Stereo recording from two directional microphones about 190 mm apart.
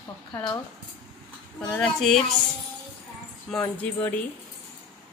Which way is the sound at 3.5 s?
10° left (ahead or behind).